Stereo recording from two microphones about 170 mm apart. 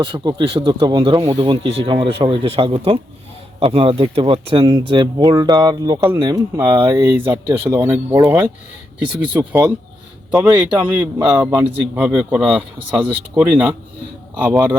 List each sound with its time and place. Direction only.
0.0 s speech: 30° right (ahead or behind)
6.6 s speech: 15° right (ahead or behind)
12.0 s speech: 5° right (ahead or behind)